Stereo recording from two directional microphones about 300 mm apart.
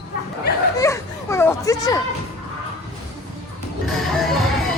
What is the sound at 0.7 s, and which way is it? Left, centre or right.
Children playing, centre.